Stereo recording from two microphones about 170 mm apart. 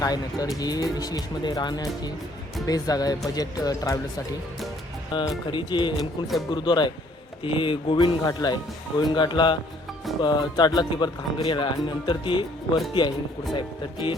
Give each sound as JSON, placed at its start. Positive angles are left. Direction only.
{"t": 0.0, "sound": "speech", "side_deg": 20}